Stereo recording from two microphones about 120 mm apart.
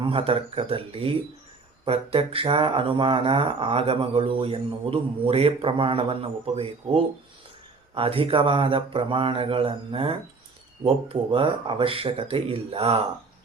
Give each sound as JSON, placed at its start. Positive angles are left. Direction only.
{"t": 0.0, "sound": "mantra", "side_deg": -45}